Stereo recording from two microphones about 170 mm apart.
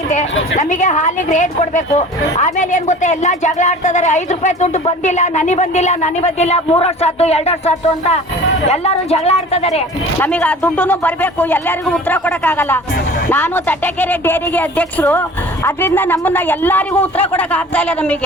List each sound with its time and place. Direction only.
0.5 s speech: 45° left (ahead or behind)
10.2 s speech: 10° left (ahead or behind)